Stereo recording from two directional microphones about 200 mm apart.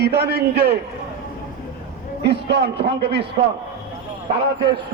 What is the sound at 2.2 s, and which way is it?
A man's voice, 55° right (ahead or behind).